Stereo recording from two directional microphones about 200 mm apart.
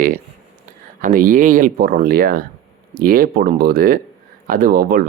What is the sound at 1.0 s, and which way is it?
Speech, 40° right (ahead or behind).